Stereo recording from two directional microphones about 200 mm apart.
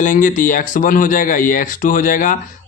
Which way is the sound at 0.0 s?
40° left (ahead or behind).